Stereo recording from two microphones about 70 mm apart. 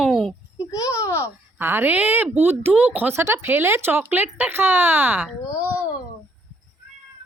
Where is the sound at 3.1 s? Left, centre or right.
Right.